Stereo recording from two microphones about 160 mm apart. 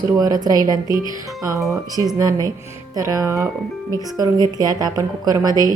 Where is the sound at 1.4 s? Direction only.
20° right (ahead or behind).